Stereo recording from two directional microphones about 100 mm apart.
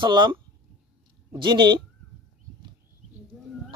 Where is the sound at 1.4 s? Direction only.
50° right (ahead or behind).